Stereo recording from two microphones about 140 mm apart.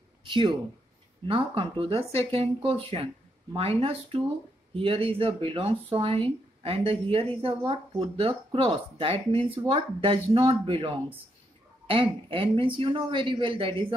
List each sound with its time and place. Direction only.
0.2 s speech: 35° right (ahead or behind)
4.7 s speech: 40° right (ahead or behind)
11.9 s speech: 40° right (ahead or behind)